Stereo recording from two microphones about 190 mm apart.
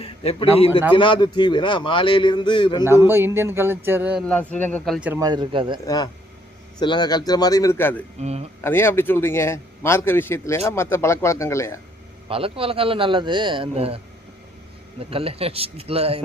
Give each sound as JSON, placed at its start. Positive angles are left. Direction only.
{"t": 0.0, "sound": "a sound", "side_deg": 30}
{"t": 0.9, "sound": "a man's voice", "side_deg": 25}
{"t": 3.1, "sound": "speech", "side_deg": -15}
{"t": 4.3, "sound": "a man's voice", "side_deg": 10}
{"t": 4.9, "sound": "speech", "side_deg": -10}
{"t": 5.2, "sound": "a man's voice", "side_deg": -25}
{"t": 5.8, "sound": "a man's voice", "side_deg": 20}
{"t": 8.2, "sound": "speech", "side_deg": -35}
{"t": 8.6, "sound": "a man's voice", "side_deg": 10}
{"t": 12.3, "sound": "a man's voice", "side_deg": -30}